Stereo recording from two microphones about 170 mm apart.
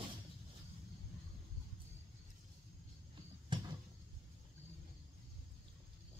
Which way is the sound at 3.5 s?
30° right (ahead or behind).